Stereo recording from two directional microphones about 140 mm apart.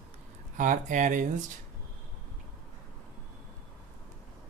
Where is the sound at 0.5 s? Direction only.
65° right (ahead or behind).